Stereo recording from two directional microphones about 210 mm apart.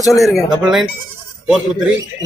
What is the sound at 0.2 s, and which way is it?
Speech, centre (ahead or behind).